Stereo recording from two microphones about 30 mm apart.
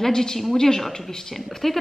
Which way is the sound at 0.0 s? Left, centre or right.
Centre.